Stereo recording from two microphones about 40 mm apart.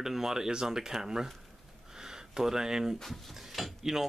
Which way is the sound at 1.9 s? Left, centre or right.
Centre.